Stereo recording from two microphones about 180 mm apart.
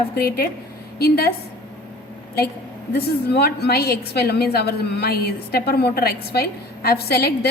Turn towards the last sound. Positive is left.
turn(degrees=60)  # may be behind; listen again after turning